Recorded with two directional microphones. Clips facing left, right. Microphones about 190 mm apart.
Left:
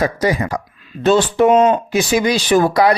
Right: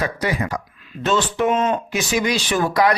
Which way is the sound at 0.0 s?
35° left (ahead or behind).